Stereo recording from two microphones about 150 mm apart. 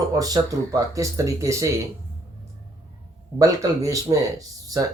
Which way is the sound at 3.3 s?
20° right (ahead or behind).